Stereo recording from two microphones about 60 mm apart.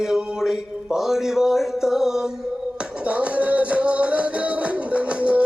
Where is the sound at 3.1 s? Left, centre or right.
Right.